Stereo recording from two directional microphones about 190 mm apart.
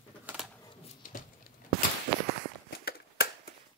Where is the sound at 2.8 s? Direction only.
55° left (ahead or behind).